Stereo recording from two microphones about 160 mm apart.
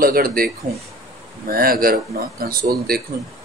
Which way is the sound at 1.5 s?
65° right (ahead or behind).